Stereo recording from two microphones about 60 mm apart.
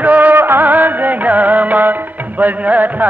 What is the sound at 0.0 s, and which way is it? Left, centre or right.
Music, right.